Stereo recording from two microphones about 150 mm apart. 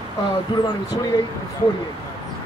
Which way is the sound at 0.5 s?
30° left (ahead or behind).